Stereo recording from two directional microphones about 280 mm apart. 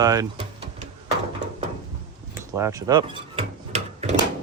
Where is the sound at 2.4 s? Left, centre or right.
Centre.